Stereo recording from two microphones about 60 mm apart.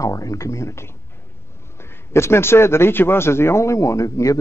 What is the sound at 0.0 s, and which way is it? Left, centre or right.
A man's voice, left.